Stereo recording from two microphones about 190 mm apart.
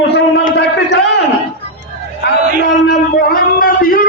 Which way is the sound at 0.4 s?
60° left (ahead or behind).